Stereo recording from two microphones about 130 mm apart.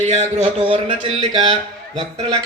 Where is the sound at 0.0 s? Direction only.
60° right (ahead or behind).